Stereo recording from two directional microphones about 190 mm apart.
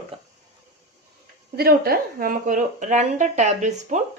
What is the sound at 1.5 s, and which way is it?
A woman's voice, 55° right (ahead or behind).